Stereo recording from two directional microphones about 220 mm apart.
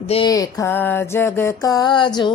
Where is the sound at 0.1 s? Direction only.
20° left (ahead or behind).